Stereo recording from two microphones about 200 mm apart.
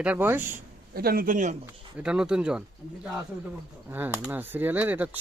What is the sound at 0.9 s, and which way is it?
Speech, 45° right (ahead or behind).